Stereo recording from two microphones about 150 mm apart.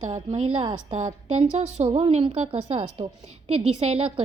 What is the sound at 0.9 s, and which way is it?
A woman's voice, 50° right (ahead or behind).